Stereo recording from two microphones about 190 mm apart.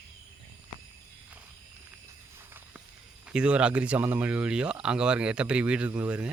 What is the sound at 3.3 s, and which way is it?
Speech, 5° right (ahead or behind).